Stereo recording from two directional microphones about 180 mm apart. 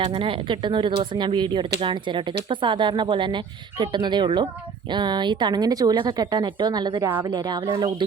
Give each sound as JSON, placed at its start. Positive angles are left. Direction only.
{"t": 0.0, "sound": "speech", "side_deg": -30}